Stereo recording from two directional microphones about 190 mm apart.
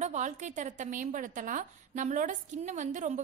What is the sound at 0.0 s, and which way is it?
A woman's voice, 40° right (ahead or behind).